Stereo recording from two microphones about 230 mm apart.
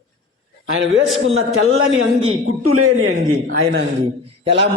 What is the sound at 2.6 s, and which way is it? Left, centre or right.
Speech, right.